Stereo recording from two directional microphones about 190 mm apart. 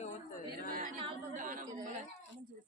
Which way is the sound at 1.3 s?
45° right (ahead or behind).